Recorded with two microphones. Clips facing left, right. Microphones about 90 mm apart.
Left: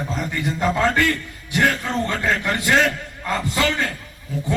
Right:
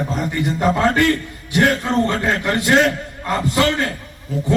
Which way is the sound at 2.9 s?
20° right (ahead or behind).